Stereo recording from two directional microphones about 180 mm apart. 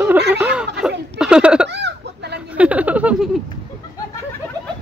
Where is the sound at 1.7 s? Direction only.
70° right (ahead or behind).